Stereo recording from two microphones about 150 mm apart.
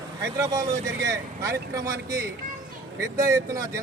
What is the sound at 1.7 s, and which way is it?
Speech, 20° right (ahead or behind).